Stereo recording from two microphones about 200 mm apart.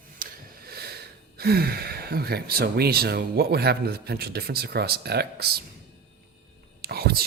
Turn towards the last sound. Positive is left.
turn(degrees=-50)  # may be behind; listen again after turning